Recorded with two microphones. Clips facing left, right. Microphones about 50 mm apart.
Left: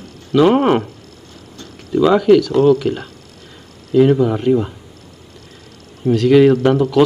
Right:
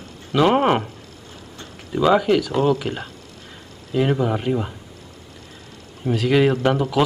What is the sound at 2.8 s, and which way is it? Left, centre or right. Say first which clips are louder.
Speech: left 7 dB; right.